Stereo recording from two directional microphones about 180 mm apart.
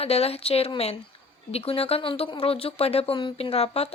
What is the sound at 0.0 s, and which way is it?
Speech, 35° left (ahead or behind).